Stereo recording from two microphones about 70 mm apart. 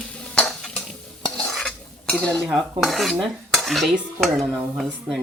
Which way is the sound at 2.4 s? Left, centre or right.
Centre.